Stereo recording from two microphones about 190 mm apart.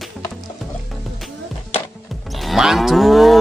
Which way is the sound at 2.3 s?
Centre (ahead or behind).